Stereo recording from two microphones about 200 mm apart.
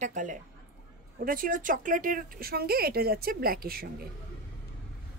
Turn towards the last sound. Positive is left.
turn(degrees=-50)  # may be behind; listen again after turning